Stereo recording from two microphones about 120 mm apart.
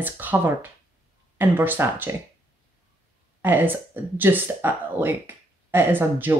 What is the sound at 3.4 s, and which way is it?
Speech, 15° right (ahead or behind).